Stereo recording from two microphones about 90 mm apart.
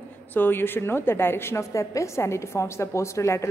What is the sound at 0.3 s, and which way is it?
A woman's voice, 20° left (ahead or behind).